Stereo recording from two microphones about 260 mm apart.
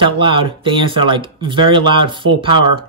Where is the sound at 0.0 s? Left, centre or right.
Centre.